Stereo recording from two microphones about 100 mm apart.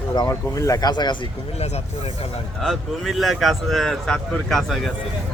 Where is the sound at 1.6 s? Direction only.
90° left.